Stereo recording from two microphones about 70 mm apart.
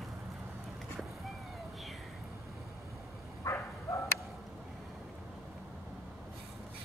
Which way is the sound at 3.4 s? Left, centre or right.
Left.